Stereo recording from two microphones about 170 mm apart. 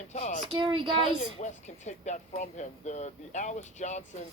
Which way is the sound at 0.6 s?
30° right (ahead or behind).